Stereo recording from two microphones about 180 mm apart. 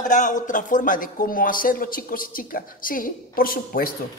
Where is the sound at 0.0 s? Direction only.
45° left (ahead or behind).